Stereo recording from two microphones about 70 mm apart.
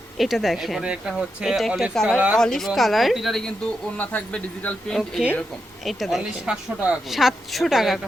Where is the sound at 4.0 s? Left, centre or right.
Left.